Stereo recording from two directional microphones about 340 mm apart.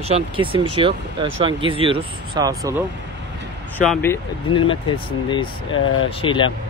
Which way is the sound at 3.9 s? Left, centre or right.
Centre.